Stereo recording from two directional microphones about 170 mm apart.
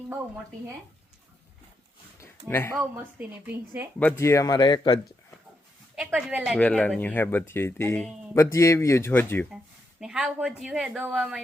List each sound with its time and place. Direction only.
2.2 s a sound: 15° left (ahead or behind)
2.7 s speech: 10° right (ahead or behind)
4.2 s speech: 20° left (ahead or behind)
6.0 s a woman's voice: 5° right (ahead or behind)
6.6 s speech: 10° left (ahead or behind)
10.0 s a woman's voice: 5° right (ahead or behind)